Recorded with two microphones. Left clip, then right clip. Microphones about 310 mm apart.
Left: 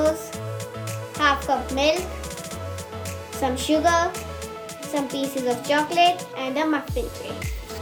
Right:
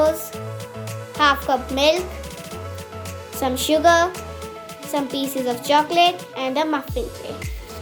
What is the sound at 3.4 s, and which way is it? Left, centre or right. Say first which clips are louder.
Speech: right 4 dB; centre.